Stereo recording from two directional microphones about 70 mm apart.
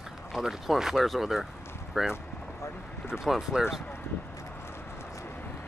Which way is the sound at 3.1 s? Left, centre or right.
Centre.